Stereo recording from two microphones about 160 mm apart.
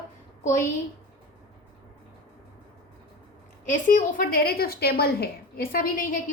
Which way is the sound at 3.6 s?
50° left (ahead or behind).